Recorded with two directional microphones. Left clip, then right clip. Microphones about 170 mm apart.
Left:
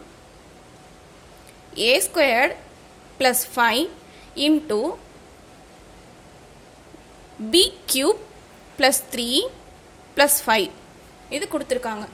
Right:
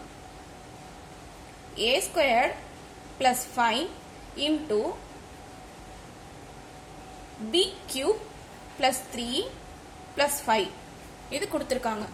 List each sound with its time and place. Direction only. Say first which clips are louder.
1.7 s a woman's voice: left 6 dB; 55° left (ahead or behind)
7.5 s a woman's voice: left 8 dB; 65° left (ahead or behind)
11.3 s a woman's voice: left 4 dB; 35° left (ahead or behind)